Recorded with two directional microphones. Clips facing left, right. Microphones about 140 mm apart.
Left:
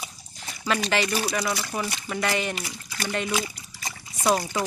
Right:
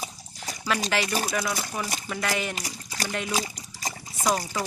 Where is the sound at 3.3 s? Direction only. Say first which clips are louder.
Left 1 dB; 35° right (ahead or behind).